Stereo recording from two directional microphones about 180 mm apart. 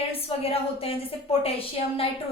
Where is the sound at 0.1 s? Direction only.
30° left (ahead or behind).